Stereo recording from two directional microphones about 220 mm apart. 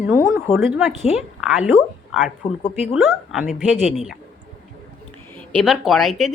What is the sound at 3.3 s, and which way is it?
Speech, centre (ahead or behind).